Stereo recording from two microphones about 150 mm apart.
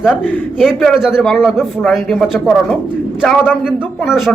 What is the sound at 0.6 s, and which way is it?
Speech, centre (ahead or behind).